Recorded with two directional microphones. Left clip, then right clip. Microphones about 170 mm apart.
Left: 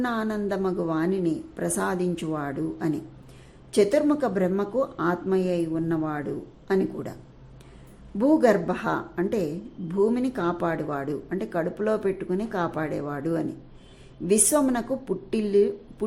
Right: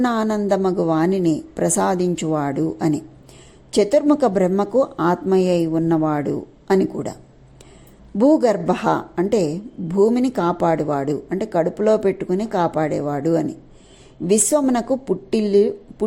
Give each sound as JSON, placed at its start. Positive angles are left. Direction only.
{"t": 0.0, "sound": "a woman's voice", "side_deg": -35}
{"t": 8.2, "sound": "speech", "side_deg": -25}